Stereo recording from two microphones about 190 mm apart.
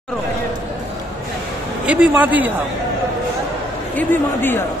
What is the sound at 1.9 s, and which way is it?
Speech, 5° right (ahead or behind).